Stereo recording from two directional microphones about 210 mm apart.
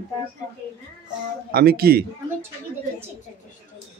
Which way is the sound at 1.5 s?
45° right (ahead or behind).